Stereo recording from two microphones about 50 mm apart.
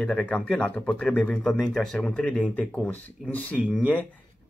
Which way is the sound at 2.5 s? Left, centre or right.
Left.